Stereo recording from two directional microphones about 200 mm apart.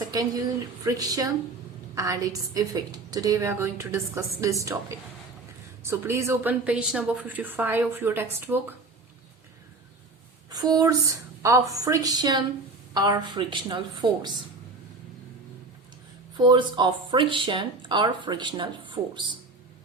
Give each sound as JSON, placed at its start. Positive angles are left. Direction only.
{"t": 0.1, "sound": "a woman's voice", "side_deg": -20}
{"t": 5.8, "sound": "a woman's voice", "side_deg": -15}
{"t": 10.5, "sound": "a woman's voice", "side_deg": -20}
{"t": 16.4, "sound": "speech", "side_deg": -25}